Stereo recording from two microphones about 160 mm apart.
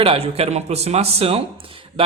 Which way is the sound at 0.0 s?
35° right (ahead or behind).